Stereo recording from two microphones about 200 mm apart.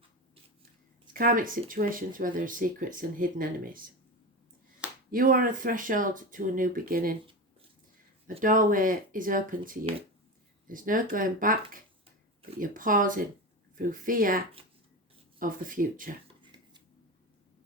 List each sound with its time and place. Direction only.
1.1 s speech: 45° right (ahead or behind)
5.1 s speech: 45° right (ahead or behind)
8.4 s speech: 40° right (ahead or behind)
16.4 s a sound: 25° right (ahead or behind)